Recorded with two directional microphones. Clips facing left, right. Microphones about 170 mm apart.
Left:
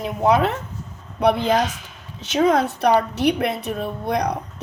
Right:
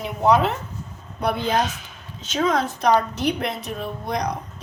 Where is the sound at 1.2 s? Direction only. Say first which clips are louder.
Left 4 dB; 75° left (ahead or behind).